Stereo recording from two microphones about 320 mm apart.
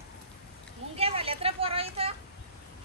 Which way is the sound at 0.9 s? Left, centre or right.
Centre.